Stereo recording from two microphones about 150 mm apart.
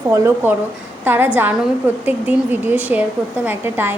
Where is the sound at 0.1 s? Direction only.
20° right (ahead or behind).